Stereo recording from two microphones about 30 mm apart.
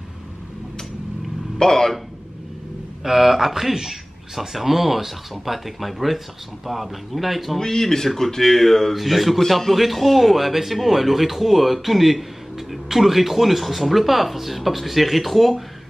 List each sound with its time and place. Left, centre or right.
1.6 s speech: centre
3.0 s a man's voice: centre
7.5 s speech: centre
8.9 s a man's voice: centre